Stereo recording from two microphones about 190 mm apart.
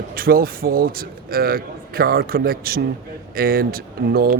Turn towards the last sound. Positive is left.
turn(degrees=-50)  # may be behind; listen again after turning